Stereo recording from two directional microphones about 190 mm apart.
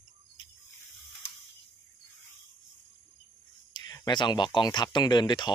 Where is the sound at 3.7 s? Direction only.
20° left (ahead or behind).